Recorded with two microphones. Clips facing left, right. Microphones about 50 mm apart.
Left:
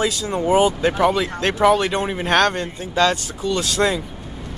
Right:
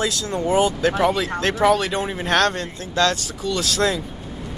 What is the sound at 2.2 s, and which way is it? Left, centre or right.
Speech, centre.